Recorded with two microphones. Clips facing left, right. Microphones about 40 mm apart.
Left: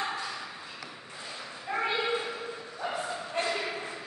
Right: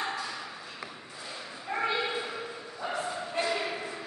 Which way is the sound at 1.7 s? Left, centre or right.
Centre.